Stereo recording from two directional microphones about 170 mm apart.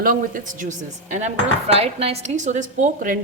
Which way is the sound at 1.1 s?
40° right (ahead or behind).